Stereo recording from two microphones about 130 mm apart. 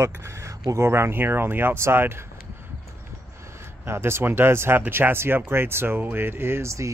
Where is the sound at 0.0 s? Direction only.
20° right (ahead or behind).